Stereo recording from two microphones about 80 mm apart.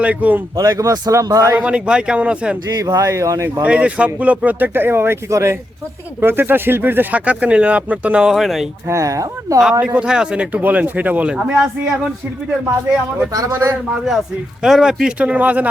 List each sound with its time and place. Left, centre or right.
0.0 s speech: centre
0.5 s a man's voice: right
1.5 s speech: centre
2.8 s speech: right
3.6 s speech: centre
8.9 s a man's voice: right
9.8 s speech: centre
11.3 s speech: centre
13.3 s a man's voice: right
13.9 s speech: centre